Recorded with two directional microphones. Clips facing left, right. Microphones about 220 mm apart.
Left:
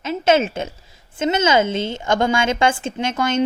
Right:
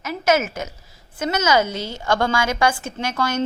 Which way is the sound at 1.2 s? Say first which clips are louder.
Left 2 dB; 25° left (ahead or behind).